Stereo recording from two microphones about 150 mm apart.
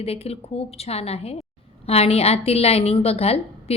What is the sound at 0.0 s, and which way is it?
A woman's voice, 40° left (ahead or behind).